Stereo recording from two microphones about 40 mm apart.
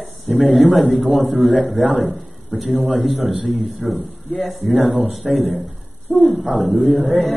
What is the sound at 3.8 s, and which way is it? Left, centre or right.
Speech, right.